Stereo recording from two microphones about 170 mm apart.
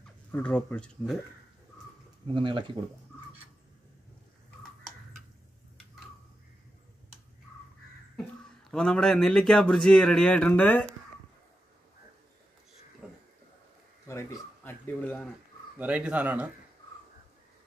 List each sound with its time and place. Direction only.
0.3 s speech: 10° left (ahead or behind)
2.3 s speech: 30° right (ahead or behind)
8.2 s a man's voice: 5° left (ahead or behind)
14.0 s speech: 15° left (ahead or behind)
15.8 s speech: 10° right (ahead or behind)